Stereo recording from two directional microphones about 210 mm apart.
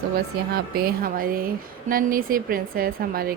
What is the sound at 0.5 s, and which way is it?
Speech, 45° right (ahead or behind).